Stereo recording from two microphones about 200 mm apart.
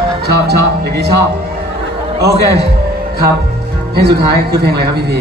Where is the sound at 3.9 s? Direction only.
55° right (ahead or behind).